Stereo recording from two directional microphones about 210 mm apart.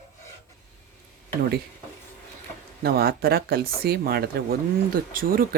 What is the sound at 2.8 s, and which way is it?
Speech, 45° right (ahead or behind).